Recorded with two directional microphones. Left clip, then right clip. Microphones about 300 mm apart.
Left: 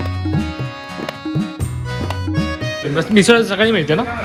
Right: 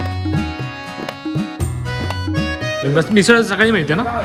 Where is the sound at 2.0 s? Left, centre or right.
Centre.